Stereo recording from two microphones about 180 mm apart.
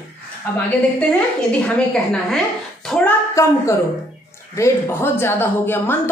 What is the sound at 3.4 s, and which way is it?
Speech, 15° left (ahead or behind).